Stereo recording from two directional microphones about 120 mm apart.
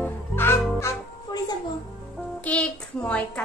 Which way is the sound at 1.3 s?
35° left (ahead or behind).